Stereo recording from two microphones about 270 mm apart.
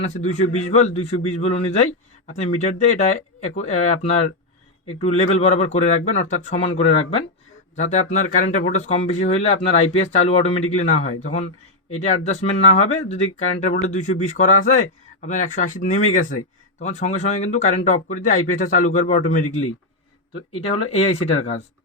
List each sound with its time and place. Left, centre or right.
0.5 s a man's voice: left